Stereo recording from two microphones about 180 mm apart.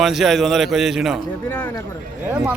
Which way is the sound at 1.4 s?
10° left (ahead or behind).